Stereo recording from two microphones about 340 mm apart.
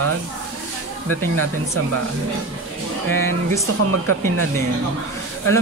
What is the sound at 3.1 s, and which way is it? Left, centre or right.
Speech, centre.